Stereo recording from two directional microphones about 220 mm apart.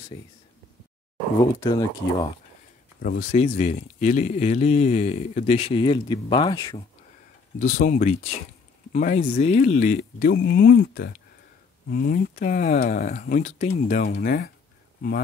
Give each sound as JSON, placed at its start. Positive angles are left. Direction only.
{"t": 0.1, "sound": "speech", "side_deg": 15}
{"t": 1.6, "sound": "speech", "side_deg": 15}
{"t": 3.0, "sound": "speech", "side_deg": 35}
{"t": 7.6, "sound": "speech", "side_deg": 35}